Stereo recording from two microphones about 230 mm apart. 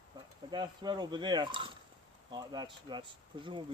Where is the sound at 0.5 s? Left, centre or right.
Centre.